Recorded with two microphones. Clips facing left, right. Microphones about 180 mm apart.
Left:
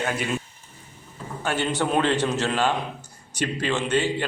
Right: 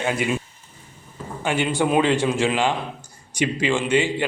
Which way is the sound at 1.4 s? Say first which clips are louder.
Right 3 dB; 10° right (ahead or behind).